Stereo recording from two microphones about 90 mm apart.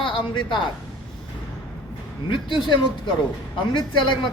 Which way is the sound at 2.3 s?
60° left (ahead or behind).